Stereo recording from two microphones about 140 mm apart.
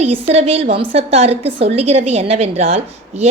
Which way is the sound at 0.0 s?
45° right (ahead or behind).